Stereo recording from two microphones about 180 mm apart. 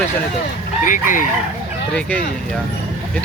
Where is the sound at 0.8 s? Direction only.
45° left (ahead or behind).